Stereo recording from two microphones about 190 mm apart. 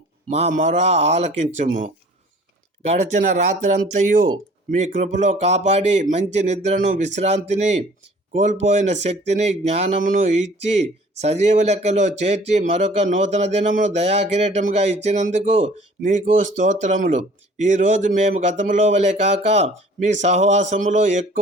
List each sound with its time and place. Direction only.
0.3 s speech: 35° right (ahead or behind)
4.8 s speech: 40° right (ahead or behind)